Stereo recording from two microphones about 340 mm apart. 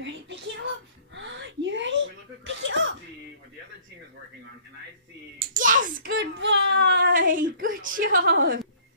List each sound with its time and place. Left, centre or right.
0.0 s a sound: right
2.4 s cough: right
5.6 s speech: right